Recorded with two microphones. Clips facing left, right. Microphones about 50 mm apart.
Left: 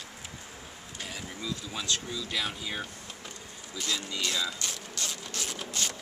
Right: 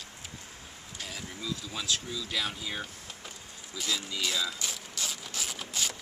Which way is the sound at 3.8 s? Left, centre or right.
Centre.